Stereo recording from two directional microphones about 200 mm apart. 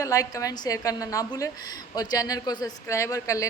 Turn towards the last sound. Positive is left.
turn(degrees=15)  # may be behind; listen again after turning